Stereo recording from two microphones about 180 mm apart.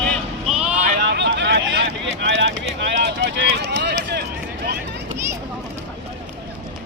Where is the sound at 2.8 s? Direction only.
70° right (ahead or behind).